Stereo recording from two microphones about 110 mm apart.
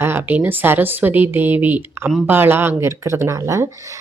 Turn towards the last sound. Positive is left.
turn(degrees=-30)  # may be behind; listen again after turning